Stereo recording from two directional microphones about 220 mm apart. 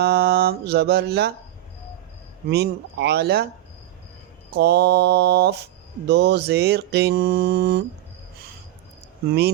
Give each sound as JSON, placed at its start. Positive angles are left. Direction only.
{"t": 0.0, "sound": "mantra", "side_deg": -45}
{"t": 2.5, "sound": "mantra", "side_deg": -45}
{"t": 4.5, "sound": "mantra", "side_deg": -45}
{"t": 9.2, "sound": "mantra", "side_deg": -45}